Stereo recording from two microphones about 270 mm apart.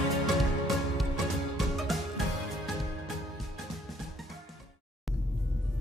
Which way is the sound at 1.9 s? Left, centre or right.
Centre.